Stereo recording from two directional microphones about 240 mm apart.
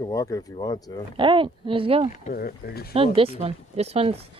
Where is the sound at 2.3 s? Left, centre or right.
Left.